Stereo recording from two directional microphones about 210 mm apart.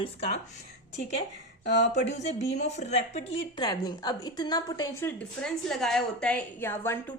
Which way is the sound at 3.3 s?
20° left (ahead or behind).